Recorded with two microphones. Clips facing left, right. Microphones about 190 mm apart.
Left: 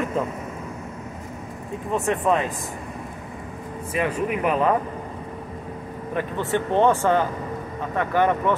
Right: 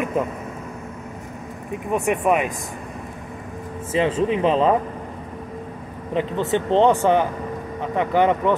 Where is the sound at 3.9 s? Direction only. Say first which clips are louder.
Right 4 dB; 25° right (ahead or behind).